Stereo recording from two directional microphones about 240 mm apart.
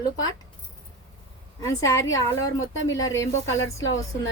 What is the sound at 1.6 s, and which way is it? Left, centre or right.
A woman's voice, centre.